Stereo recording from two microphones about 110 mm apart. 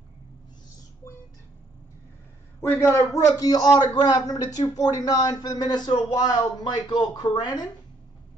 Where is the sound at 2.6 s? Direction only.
25° left (ahead or behind); by 7.7 s 40° left (ahead or behind).